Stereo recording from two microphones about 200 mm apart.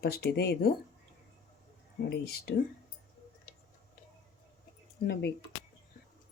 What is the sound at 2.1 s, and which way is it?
Speech, 50° left (ahead or behind).